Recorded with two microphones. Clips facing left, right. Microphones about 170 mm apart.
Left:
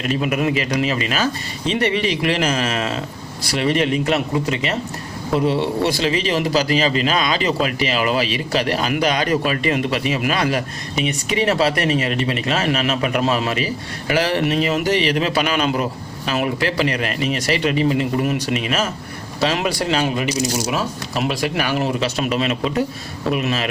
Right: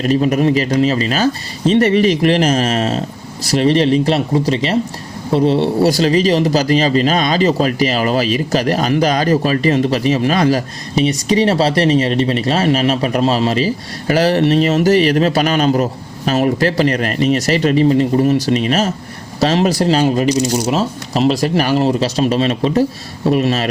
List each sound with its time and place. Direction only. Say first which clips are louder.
0.0 s speech: right 6 dB; 40° right (ahead or behind)